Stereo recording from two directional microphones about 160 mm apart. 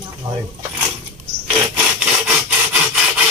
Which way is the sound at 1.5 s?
5° right (ahead or behind).